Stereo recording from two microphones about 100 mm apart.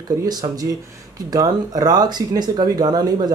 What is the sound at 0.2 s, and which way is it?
Speech, 40° right (ahead or behind).